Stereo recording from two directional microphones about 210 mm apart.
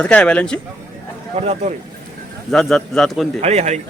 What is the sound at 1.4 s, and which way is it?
Speech, 30° right (ahead or behind).